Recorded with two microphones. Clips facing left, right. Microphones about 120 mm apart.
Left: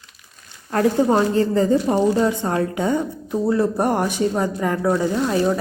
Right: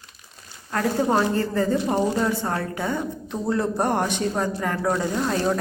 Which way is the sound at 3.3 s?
5° left (ahead or behind).